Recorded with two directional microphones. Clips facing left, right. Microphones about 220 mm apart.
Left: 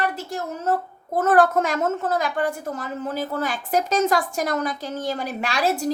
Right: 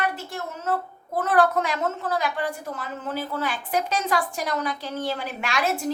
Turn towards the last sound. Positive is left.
turn(degrees=35)  # may be behind; listen again after turning